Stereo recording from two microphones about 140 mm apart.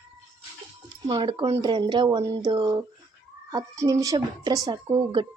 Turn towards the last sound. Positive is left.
turn(degrees=-35)  # may be behind; listen again after turning